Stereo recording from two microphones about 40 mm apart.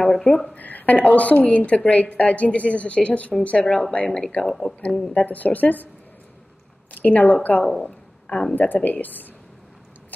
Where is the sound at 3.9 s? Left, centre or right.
Left.